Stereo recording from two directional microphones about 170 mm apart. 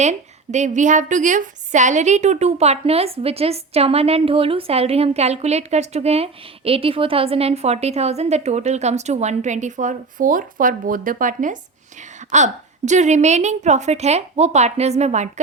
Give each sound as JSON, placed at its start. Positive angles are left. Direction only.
{"t": 0.0, "sound": "a woman's voice", "side_deg": -45}